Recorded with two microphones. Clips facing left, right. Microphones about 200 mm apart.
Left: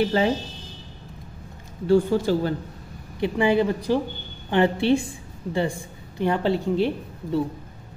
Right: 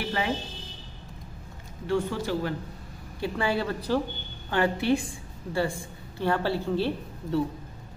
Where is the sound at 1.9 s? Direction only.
30° left (ahead or behind).